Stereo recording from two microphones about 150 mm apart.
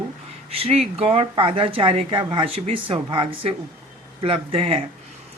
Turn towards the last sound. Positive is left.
turn(degrees=-40)  # may be behind; listen again after turning